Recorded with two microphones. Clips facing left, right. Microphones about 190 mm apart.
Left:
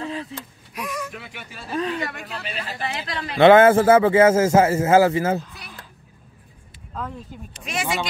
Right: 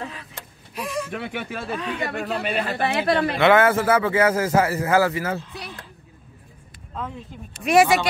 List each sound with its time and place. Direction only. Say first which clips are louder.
0.7 s a sound: right 2 dB; 30° right (ahead or behind)
1.1 s a man's voice: right 9 dB; 60° right (ahead or behind)
3.3 s speech: left 7 dB; 30° left (ahead or behind)
6.9 s speech: even; centre (ahead or behind)
7.5 s a man's voice: right 13 dB; 65° right (ahead or behind)